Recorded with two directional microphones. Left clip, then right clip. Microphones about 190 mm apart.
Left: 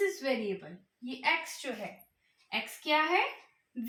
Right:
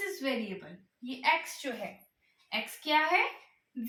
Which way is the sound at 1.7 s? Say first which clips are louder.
Right 1 dB; 20° left (ahead or behind).